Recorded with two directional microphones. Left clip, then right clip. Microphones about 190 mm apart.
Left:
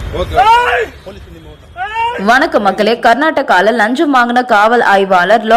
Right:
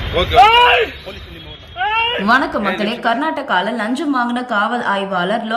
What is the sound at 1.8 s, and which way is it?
A woman's voice, 10° left (ahead or behind).